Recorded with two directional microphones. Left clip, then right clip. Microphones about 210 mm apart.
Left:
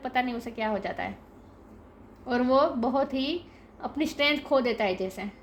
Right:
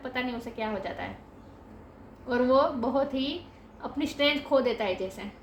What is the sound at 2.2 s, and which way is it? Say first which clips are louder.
A woman's voice: even; 45° left (ahead or behind).